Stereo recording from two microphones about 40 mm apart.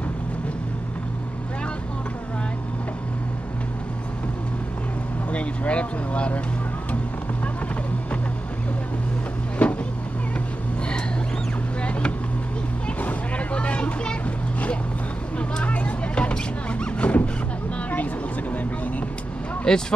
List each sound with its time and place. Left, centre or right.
5.3 s speech: left
9.6 s boat: left
11.8 s boat: left
13.0 s a sound: left
15.3 s a sound: left
17.9 s vehicle: left
19.7 s speech: centre